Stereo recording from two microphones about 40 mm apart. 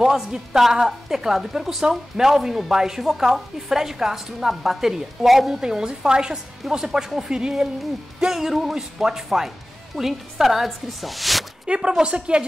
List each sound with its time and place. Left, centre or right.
0.0 s a woman's voice: centre
5.6 s a woman's voice: centre
11.6 s a woman's voice: right